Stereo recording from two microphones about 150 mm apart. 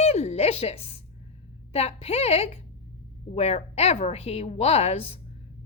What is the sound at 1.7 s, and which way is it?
A woman's voice, 45° left (ahead or behind).